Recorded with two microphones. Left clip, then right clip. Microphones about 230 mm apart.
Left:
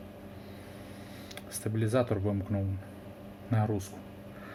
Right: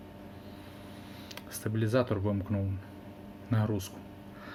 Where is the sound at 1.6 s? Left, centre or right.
Centre.